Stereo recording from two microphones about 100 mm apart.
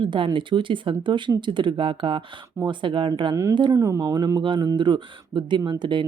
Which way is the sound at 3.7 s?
30° right (ahead or behind).